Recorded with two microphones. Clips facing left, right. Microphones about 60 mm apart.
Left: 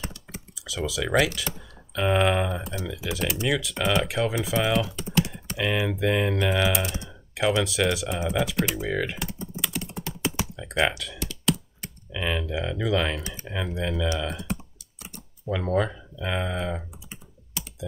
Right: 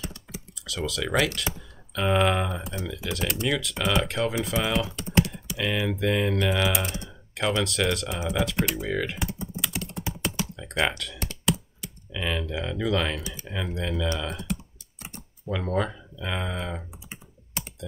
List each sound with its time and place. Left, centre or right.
0.6 s speech: centre
5.6 s speech: centre
9.4 s computer keyboard: centre
12.1 s speech: centre
14.0 s speech: centre
15.0 s computer keyboard: right
15.4 s speech: centre
17.6 s computer keyboard: right